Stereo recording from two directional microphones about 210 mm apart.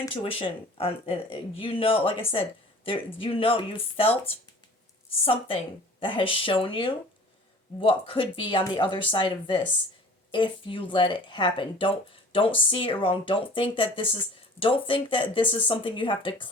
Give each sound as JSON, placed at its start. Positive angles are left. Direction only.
{"t": 0.0, "sound": "speech", "side_deg": 25}
{"t": 5.2, "sound": "speech", "side_deg": 25}